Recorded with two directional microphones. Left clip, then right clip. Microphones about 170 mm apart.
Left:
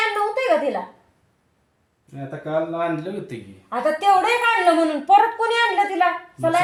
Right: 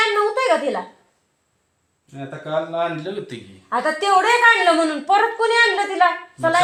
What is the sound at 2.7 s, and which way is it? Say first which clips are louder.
Speech: right 1 dB; 15° left (ahead or behind).